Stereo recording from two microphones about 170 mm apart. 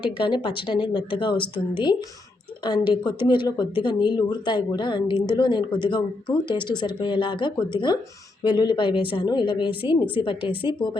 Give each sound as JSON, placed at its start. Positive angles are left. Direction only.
{"t": 0.2, "sound": "a woman's voice", "side_deg": 30}